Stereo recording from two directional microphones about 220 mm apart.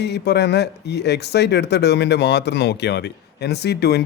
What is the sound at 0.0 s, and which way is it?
Speech, 50° left (ahead or behind).